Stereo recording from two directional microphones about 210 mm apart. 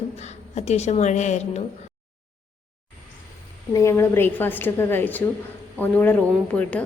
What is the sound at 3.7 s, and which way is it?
A woman's voice, 15° left (ahead or behind).